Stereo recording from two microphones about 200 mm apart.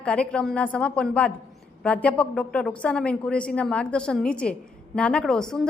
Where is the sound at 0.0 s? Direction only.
5° left (ahead or behind).